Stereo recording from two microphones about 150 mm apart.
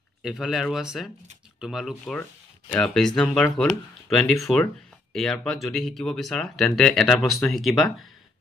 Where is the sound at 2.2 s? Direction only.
10° left (ahead or behind).